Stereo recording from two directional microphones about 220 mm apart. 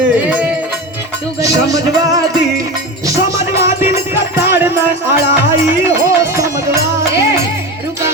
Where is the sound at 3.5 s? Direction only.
10° right (ahead or behind).